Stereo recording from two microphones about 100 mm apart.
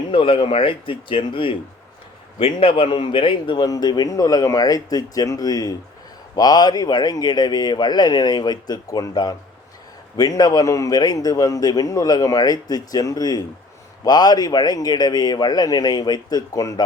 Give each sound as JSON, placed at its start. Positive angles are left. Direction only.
{"t": 0.1, "sound": "speech", "side_deg": 60}
{"t": 3.7, "sound": "a man's voice", "side_deg": 45}